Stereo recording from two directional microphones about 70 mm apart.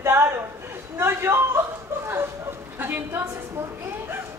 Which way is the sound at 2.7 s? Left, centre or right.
Right.